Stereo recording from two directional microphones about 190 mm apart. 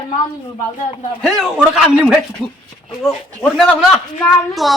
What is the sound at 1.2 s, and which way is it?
Speech, centre (ahead or behind).